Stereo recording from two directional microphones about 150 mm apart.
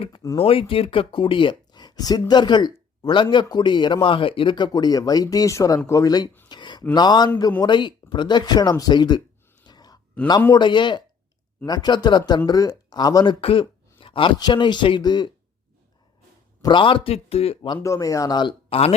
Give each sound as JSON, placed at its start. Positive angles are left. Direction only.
{"t": 0.3, "sound": "speech", "side_deg": 40}
{"t": 6.5, "sound": "a sound", "side_deg": 30}
{"t": 6.9, "sound": "speech", "side_deg": 30}
{"t": 9.6, "sound": "a sound", "side_deg": 25}
{"t": 10.5, "sound": "speech", "side_deg": 30}
{"t": 13.4, "sound": "speech", "side_deg": 35}
{"t": 16.6, "sound": "speech", "side_deg": 30}
{"t": 17.7, "sound": "speech", "side_deg": 20}